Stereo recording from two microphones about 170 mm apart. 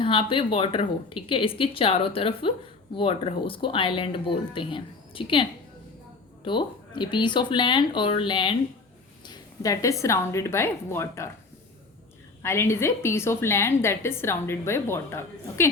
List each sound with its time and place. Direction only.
0.0 s speech: 30° left (ahead or behind)
9.2 s a sound: 25° left (ahead or behind)
10.0 s a woman's voice: 15° left (ahead or behind)
12.4 s a woman's voice: 15° left (ahead or behind)